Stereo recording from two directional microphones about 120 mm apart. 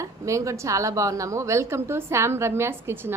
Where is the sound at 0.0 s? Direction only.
25° right (ahead or behind).